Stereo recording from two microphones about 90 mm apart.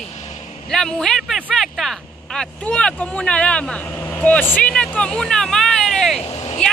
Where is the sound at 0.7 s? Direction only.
5° left (ahead or behind).